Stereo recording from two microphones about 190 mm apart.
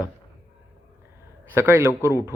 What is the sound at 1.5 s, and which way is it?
Speech, 15° right (ahead or behind).